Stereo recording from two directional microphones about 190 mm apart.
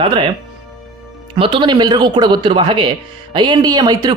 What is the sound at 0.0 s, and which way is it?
Speech, 25° right (ahead or behind).